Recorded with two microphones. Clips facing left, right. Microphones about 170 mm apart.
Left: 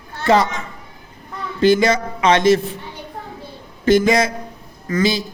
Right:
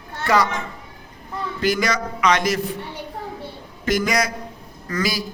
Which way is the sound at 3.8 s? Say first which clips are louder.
Left 7 dB; 25° left (ahead or behind).